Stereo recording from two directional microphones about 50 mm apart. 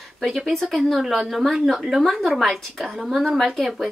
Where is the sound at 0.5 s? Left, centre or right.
Centre.